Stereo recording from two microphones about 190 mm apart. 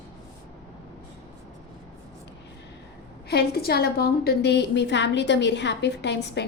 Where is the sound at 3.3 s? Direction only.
55° left (ahead or behind).